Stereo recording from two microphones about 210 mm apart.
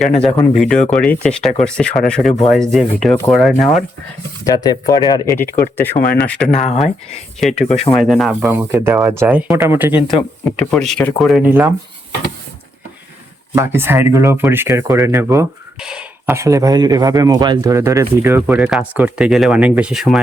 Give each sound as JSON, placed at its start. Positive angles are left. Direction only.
{"t": 0.5, "sound": "speech", "side_deg": 0}
{"t": 4.4, "sound": "speech", "side_deg": 20}
{"t": 6.5, "sound": "speech", "side_deg": 35}
{"t": 7.3, "sound": "speech", "side_deg": 0}
{"t": 10.6, "sound": "speech", "side_deg": 5}
{"t": 13.6, "sound": "speech", "side_deg": -10}